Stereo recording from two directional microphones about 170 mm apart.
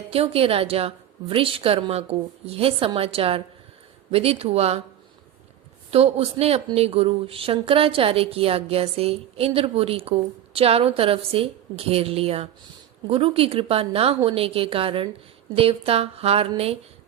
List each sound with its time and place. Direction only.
0.1 s a woman's voice: 35° right (ahead or behind)
5.9 s a woman's voice: 35° right (ahead or behind)